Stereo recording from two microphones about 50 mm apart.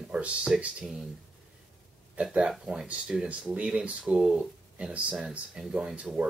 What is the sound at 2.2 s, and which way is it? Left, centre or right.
Speech, centre.